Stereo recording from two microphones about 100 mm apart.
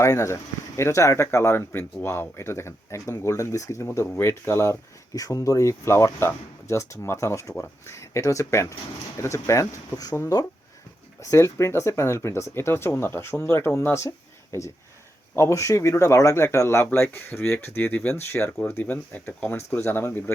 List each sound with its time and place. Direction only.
0.0 s speech: 30° left (ahead or behind)
11.2 s speech: 30° left (ahead or behind)
15.4 s speech: 30° left (ahead or behind)